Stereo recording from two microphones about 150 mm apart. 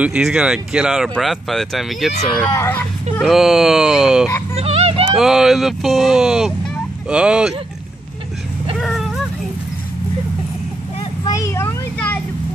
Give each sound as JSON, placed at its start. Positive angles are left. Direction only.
{"t": 0.0, "sound": "speech", "side_deg": -5}
{"t": 2.5, "sound": "speech", "side_deg": 20}
{"t": 3.2, "sound": "speech", "side_deg": 0}
{"t": 4.6, "sound": "a sound", "side_deg": -40}
{"t": 5.1, "sound": "speech", "side_deg": -5}
{"t": 8.7, "sound": "vehicle", "side_deg": 0}
{"t": 11.2, "sound": "children playing", "side_deg": 20}